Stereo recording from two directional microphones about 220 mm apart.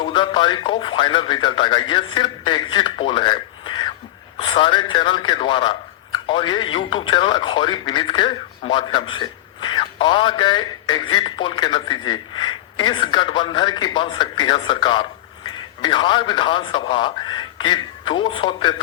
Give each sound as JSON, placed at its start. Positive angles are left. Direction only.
{"t": 0.0, "sound": "speech", "side_deg": 20}